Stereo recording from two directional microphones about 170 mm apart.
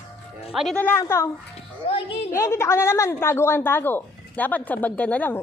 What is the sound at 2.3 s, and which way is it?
A woman's voice, 15° left (ahead or behind).